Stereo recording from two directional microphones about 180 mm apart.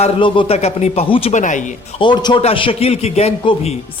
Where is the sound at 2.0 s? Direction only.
25° left (ahead or behind).